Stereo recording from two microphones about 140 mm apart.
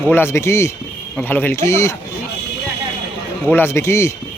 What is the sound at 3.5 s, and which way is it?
Speech, 20° left (ahead or behind).